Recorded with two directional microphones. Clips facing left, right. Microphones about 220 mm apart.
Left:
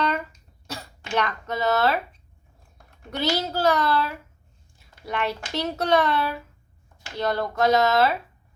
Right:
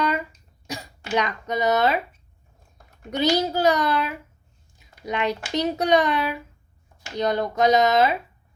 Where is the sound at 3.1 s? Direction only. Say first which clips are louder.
Right 4 dB; 15° right (ahead or behind).